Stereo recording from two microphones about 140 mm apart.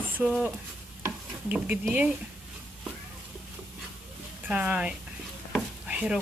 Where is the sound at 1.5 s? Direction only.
10° right (ahead or behind).